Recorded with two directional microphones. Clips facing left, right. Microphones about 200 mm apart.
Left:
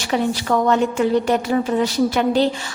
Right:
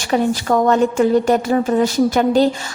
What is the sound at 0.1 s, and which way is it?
A woman's voice, 45° right (ahead or behind).